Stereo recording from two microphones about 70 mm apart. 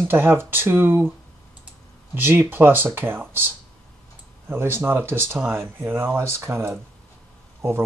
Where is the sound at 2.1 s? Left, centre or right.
Right.